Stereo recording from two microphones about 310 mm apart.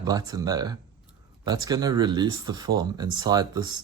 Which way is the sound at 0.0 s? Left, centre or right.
Centre.